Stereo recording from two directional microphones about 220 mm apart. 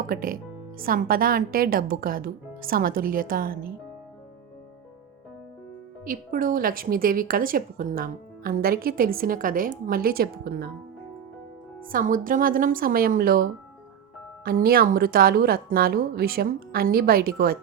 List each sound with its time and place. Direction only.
0.1 s a woman's voice: 40° right (ahead or behind)
6.1 s a woman's voice: 40° right (ahead or behind)
11.9 s a woman's voice: 40° right (ahead or behind)